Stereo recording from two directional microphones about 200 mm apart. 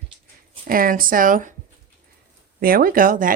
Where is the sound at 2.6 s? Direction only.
45° right (ahead or behind).